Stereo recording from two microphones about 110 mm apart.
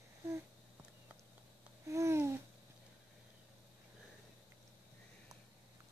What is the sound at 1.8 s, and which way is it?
Babbling, 25° right (ahead or behind).